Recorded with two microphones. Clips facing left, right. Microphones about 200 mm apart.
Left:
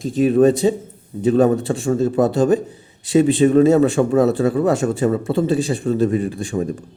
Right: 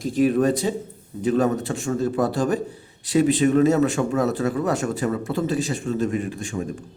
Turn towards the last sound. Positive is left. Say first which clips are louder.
# left 6 dB
turn(degrees=35)  # may be behind; listen again after turning